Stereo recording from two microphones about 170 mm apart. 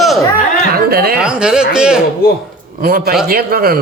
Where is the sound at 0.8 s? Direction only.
65° right (ahead or behind).